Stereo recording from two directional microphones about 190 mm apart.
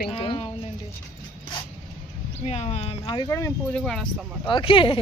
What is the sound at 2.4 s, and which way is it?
Speech, 35° left (ahead or behind).